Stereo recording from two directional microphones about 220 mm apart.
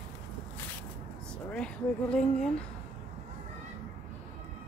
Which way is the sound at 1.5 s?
5° left (ahead or behind).